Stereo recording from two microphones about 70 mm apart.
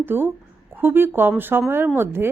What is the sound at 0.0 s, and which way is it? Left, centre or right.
A woman's voice, right.